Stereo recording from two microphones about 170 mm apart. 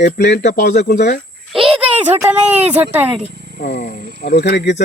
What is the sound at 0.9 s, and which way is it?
Speech, 65° left (ahead or behind).